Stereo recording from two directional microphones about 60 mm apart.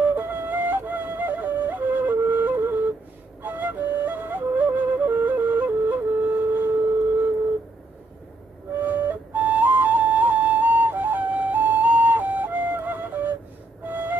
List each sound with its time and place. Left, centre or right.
0.1 s flute: right
8.8 s flute: right
13.8 s music: right